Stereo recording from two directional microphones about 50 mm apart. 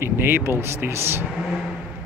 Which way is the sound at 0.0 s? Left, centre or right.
Right.